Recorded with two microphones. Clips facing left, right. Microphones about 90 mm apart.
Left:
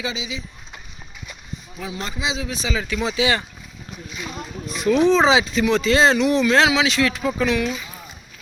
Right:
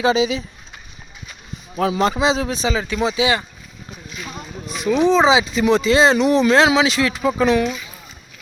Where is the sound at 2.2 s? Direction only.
40° right (ahead or behind); by 3.4 s 20° right (ahead or behind).